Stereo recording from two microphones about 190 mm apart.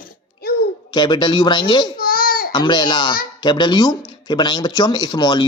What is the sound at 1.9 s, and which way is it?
Baby cry, 50° left (ahead or behind).